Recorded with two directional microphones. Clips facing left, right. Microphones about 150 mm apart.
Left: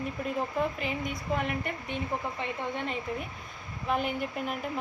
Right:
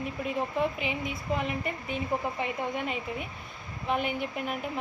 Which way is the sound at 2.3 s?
15° right (ahead or behind).